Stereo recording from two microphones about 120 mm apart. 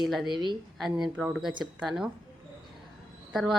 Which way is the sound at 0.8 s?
5° right (ahead or behind).